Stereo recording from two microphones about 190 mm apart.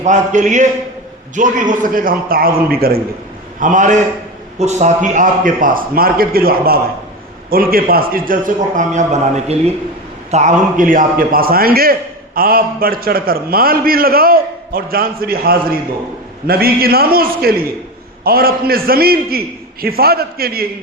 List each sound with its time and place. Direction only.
0.0 s a man's voice: 40° right (ahead or behind)